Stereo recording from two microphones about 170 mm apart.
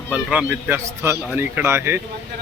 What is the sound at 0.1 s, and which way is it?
Speech, 5° right (ahead or behind).